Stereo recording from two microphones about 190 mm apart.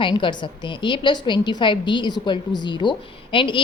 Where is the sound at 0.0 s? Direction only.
25° left (ahead or behind).